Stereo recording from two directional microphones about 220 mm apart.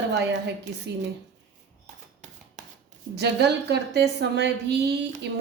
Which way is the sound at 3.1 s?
50° right (ahead or behind).